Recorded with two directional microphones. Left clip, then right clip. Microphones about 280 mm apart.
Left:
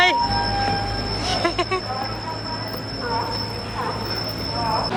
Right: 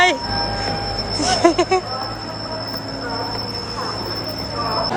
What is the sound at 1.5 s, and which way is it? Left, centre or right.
Speech, centre.